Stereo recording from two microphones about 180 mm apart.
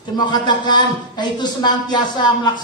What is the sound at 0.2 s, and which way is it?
Speech, 25° left (ahead or behind).